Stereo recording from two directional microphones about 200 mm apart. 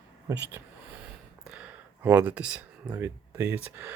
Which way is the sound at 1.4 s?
5° right (ahead or behind).